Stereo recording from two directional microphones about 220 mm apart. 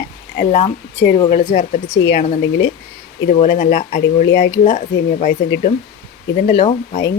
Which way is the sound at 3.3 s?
35° left (ahead or behind).